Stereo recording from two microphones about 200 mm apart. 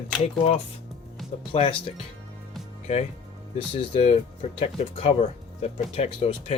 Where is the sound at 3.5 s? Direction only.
25° left (ahead or behind).